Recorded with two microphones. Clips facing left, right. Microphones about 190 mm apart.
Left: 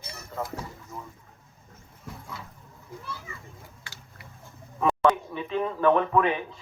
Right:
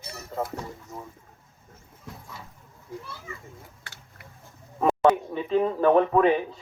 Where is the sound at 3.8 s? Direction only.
55° right (ahead or behind).